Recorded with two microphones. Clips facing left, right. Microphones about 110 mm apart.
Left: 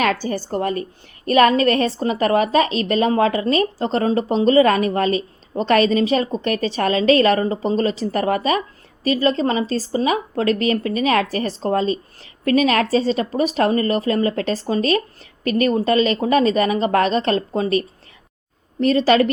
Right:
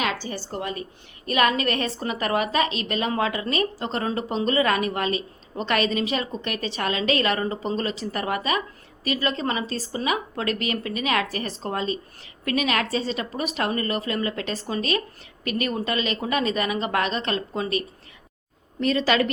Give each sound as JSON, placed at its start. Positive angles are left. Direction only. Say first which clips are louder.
{"t": 0.0, "sound": "a woman's voice", "louder": "left 7 dB", "side_deg": 50}